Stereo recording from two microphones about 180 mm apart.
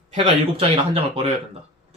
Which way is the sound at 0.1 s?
35° right (ahead or behind).